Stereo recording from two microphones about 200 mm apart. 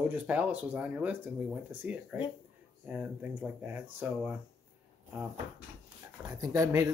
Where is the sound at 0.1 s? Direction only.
5° right (ahead or behind).